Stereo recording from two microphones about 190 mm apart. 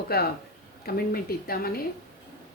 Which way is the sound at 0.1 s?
55° left (ahead or behind).